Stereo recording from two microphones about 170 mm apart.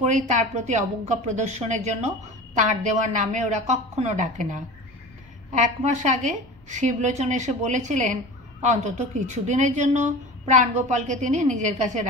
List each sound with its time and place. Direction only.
0.0 s a woman's voice: 45° right (ahead or behind)